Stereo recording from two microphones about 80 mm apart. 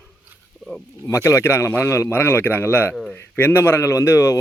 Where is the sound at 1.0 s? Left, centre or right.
Left.